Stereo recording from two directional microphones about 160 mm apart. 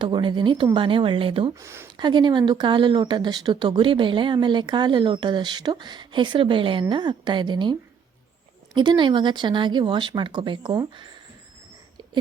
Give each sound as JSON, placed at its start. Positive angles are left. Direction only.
{"t": 0.0, "sound": "speech", "side_deg": -30}
{"t": 1.5, "sound": "speech", "side_deg": -15}
{"t": 2.0, "sound": "speech", "side_deg": -30}